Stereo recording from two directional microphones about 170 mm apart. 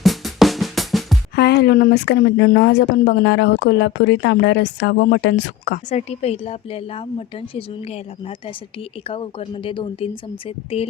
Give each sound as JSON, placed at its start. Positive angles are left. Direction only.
{"t": 0.0, "sound": "drum", "side_deg": 0}
{"t": 1.4, "sound": "speech", "side_deg": 70}
{"t": 5.9, "sound": "a woman's voice", "side_deg": 40}